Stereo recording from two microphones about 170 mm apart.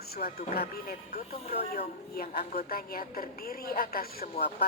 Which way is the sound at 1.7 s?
60° left (ahead or behind).